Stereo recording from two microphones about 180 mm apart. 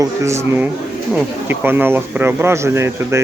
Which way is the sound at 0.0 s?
15° right (ahead or behind).